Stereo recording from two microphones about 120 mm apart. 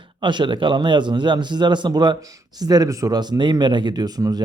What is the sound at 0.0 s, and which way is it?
A man's voice, 40° right (ahead or behind).